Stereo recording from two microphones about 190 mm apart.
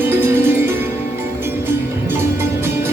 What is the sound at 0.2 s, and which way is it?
Music, 10° right (ahead or behind).